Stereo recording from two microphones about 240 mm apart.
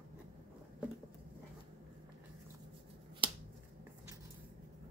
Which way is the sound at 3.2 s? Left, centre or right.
Right.